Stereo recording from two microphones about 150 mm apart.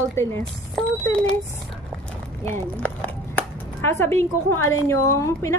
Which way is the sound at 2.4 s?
15° left (ahead or behind).